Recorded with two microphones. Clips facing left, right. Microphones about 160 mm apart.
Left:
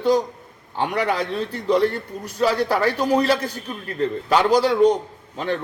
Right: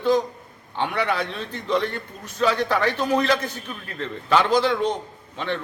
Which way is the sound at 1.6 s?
10° left (ahead or behind).